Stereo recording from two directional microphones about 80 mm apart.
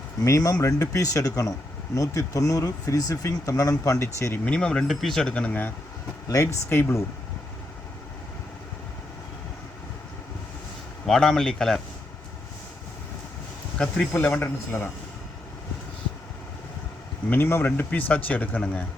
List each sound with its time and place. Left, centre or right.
0.3 s speech: left
4.4 s speech: centre
5.3 s speech: centre
6.2 s speech: left
11.0 s speech: centre
13.7 s speech: centre
17.2 s speech: left